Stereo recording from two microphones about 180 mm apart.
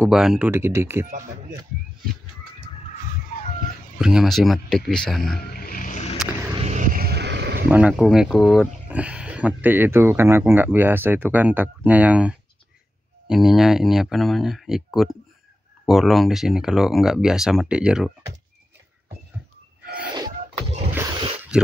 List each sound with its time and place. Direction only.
0.1 s speech: 5° right (ahead or behind)
0.5 s speech: 15° right (ahead or behind)
4.0 s speech: centre (ahead or behind)
5.5 s vehicle: 55° left (ahead or behind)
6.6 s vehicle: 45° right (ahead or behind); by 7.6 s 70° right (ahead or behind)
7.7 s speech: 5° right (ahead or behind)
21.5 s speech: 5° right (ahead or behind)